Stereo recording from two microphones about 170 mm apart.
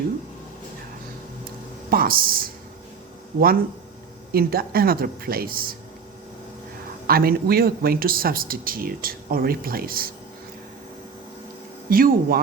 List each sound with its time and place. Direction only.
1.9 s speech: 60° right (ahead or behind)
4.3 s speech: 60° right (ahead or behind)
7.1 s speech: 60° right (ahead or behind)
11.9 s speech: 60° right (ahead or behind)